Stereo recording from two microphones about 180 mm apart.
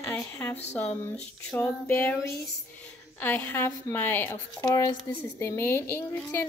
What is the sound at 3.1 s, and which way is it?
A woman's voice, 10° left (ahead or behind).